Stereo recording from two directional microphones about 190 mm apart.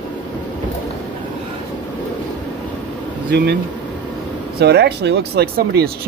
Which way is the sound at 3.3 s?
60° right (ahead or behind).